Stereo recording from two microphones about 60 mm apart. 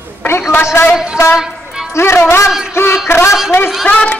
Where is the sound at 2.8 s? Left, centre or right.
Left.